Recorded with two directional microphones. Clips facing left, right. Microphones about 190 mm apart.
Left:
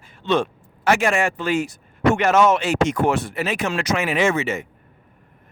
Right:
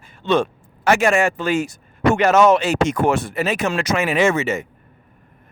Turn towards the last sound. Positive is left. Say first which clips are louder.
# right 2 dB
turn(degrees=-45)  # may be behind; listen again after turning